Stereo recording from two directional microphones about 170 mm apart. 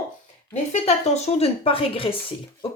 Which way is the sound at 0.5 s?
40° left (ahead or behind).